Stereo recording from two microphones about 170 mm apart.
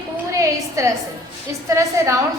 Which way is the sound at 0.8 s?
20° right (ahead or behind).